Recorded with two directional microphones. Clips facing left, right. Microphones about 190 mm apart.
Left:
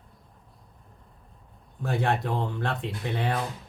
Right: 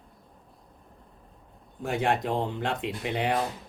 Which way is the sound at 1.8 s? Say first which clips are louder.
Even; 15° right (ahead or behind).